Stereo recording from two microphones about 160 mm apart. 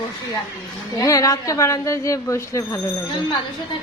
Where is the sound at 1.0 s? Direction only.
20° left (ahead or behind).